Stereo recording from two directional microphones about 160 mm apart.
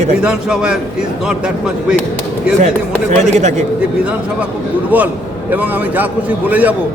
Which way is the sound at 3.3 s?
45° right (ahead or behind).